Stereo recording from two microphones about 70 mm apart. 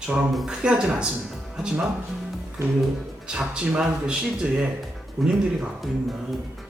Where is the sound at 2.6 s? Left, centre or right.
Right.